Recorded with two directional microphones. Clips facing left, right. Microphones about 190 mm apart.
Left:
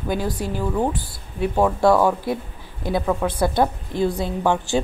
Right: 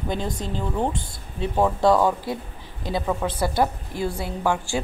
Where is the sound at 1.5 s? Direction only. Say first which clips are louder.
Left 2 dB; 5° right (ahead or behind).